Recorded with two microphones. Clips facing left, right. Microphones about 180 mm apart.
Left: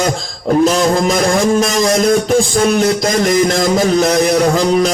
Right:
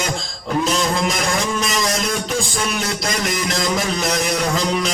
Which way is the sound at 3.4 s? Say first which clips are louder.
Left 8 dB; 45° left (ahead or behind).